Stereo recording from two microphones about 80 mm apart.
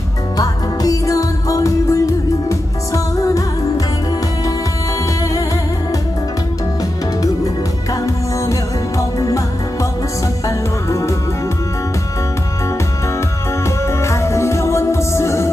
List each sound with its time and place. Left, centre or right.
0.3 s music: left
8.0 s music: left
10.4 s music: left
13.7 s music: left